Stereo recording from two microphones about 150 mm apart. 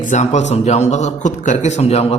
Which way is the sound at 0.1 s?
50° left (ahead or behind).